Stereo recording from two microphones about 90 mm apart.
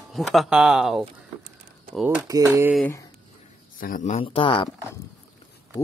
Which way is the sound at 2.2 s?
35° right (ahead or behind).